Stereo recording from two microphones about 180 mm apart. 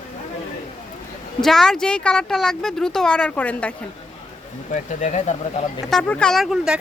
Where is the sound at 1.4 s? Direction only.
Centre (ahead or behind).